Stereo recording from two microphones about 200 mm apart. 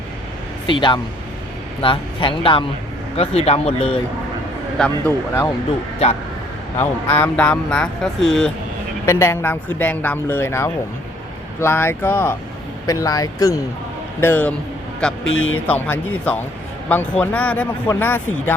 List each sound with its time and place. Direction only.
0.7 s speech: 25° left (ahead or behind)
4.8 s speech: 10° left (ahead or behind)
6.7 s speech: 10° left (ahead or behind)
15.4 s speech: 90° left
15.6 s speech: 5° left (ahead or behind)